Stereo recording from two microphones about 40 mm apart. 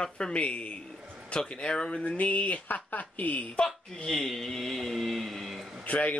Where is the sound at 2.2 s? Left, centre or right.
Left.